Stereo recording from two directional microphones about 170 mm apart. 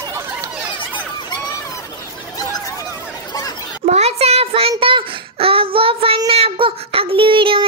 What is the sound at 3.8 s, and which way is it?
Child singing, 40° right (ahead or behind).